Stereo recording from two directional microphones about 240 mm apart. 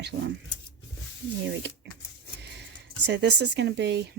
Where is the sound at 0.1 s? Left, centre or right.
Right.